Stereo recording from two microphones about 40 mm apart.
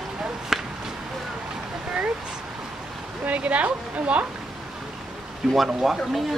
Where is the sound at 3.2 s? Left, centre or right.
Right.